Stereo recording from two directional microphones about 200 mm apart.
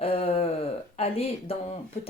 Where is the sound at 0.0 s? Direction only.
30° left (ahead or behind).